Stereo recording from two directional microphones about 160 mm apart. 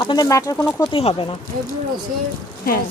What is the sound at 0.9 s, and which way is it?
Speech, 35° left (ahead or behind).